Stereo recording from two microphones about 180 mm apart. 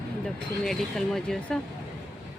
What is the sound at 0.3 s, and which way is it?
Speech, centre (ahead or behind).